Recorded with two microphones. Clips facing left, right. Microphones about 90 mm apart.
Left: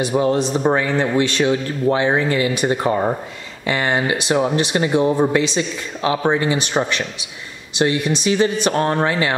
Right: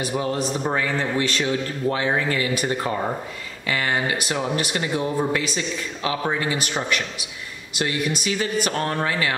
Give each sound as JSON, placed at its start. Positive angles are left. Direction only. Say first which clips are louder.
{"t": 0.2, "sound": "a man's voice", "louder": "left 7 dB", "side_deg": 25}